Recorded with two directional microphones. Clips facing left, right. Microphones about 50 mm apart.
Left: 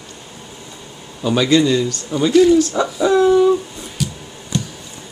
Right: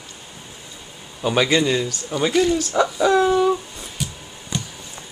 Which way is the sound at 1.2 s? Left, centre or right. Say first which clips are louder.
Left 3 dB; right.